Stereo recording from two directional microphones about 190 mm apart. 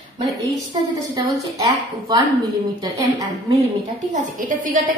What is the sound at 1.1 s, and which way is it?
A woman's voice, 20° right (ahead or behind).